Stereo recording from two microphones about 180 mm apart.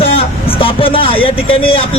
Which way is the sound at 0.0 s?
30° left (ahead or behind).